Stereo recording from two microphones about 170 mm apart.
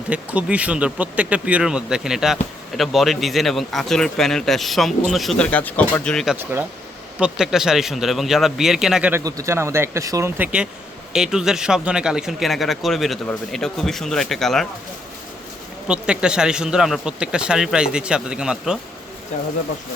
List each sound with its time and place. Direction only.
0.1 s speech: 5° right (ahead or behind)
6.3 s speech: 10° right (ahead or behind)
9.2 s speech: 15° right (ahead or behind); by 14.7 s centre (ahead or behind)
15.9 s speech: 5° right (ahead or behind)